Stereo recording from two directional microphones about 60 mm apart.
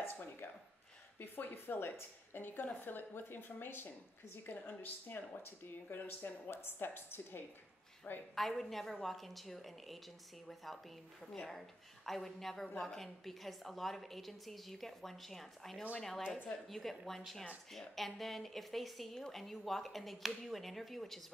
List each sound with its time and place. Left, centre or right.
0.0 s a sound: left
1.2 s a woman's voice: left
8.4 s a woman's voice: centre
12.1 s a woman's voice: centre